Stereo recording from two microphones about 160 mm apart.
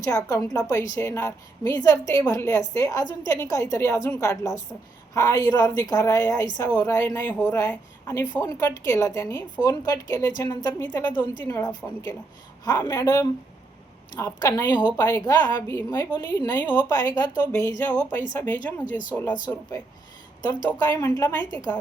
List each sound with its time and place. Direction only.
0.3 s a woman's voice: 20° left (ahead or behind)